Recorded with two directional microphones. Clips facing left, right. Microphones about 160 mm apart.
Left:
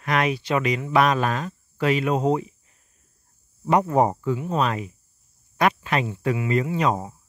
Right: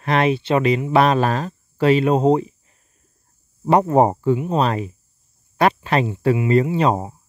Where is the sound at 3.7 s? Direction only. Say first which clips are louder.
Right 4 dB; 30° right (ahead or behind).